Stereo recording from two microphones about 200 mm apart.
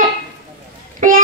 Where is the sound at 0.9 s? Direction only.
40° right (ahead or behind).